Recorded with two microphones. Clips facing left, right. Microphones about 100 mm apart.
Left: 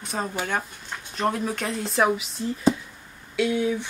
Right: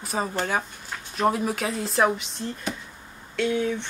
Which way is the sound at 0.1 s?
Centre (ahead or behind).